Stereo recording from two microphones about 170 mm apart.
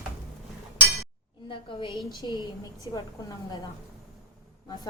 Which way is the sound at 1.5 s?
30° left (ahead or behind).